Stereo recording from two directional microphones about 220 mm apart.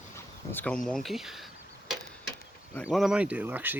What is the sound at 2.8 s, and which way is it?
Speech, centre (ahead or behind).